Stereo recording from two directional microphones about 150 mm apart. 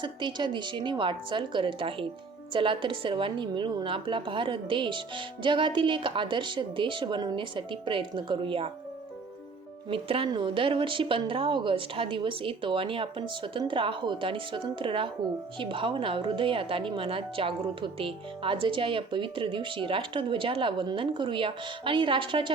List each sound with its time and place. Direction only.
0.0 s a woman's voice: 30° right (ahead or behind)
9.9 s a woman's voice: 35° right (ahead or behind)